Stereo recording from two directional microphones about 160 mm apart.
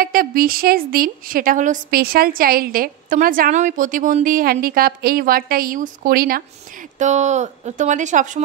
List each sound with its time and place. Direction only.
0.0 s a woman's voice: 65° right (ahead or behind)